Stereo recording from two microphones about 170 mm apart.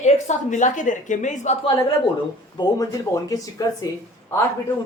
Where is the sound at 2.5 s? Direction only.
20° left (ahead or behind).